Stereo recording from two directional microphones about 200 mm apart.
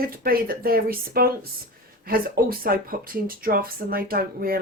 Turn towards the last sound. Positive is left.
turn(degrees=-45)  # may be behind; listen again after turning